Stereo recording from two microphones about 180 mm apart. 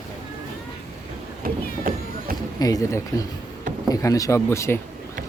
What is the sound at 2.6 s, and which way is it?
Speech, 15° left (ahead or behind).